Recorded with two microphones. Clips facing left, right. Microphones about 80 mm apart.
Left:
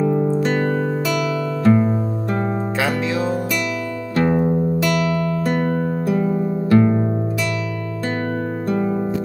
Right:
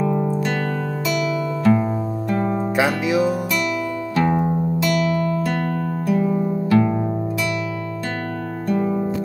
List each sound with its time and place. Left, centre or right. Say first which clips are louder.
0.4 s music: left 4 dB; left
1.7 s music: left 3 dB; centre
2.8 s music: right 3 dB; centre
6.7 s music: left 3 dB; left